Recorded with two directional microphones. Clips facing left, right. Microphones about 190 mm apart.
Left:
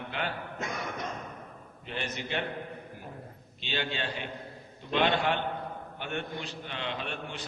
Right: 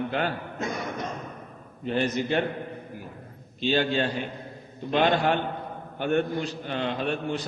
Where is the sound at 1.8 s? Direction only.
40° right (ahead or behind).